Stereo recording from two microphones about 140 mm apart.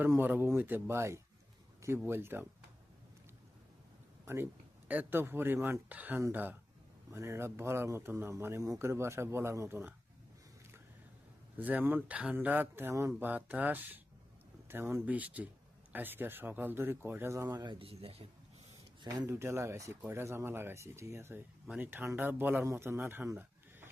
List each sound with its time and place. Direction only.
0.0 s speech: 15° right (ahead or behind)
4.9 s speech: 15° right (ahead or behind)
11.5 s speech: 10° right (ahead or behind); by 18.3 s 45° right (ahead or behind)
19.0 s speech: 25° right (ahead or behind)
23.3 s a sound: 15° right (ahead or behind)